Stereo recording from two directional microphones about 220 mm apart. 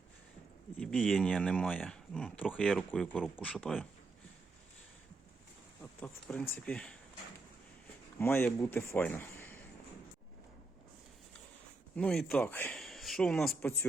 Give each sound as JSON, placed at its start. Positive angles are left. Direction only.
{"t": 0.8, "sound": "speech", "side_deg": 0}
{"t": 5.8, "sound": "speech", "side_deg": 5}
{"t": 8.2, "sound": "speech", "side_deg": 10}
{"t": 11.9, "sound": "speech", "side_deg": 5}